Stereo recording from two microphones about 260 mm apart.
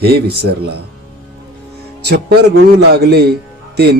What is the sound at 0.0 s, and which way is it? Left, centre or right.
Speech, right.